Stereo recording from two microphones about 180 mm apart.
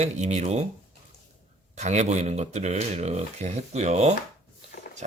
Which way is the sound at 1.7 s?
40° right (ahead or behind).